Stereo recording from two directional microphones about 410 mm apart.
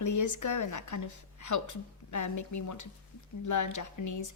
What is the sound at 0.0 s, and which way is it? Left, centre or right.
A woman's voice, left.